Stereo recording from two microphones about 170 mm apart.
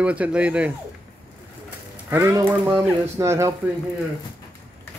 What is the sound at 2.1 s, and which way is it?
Speech, 15° right (ahead or behind).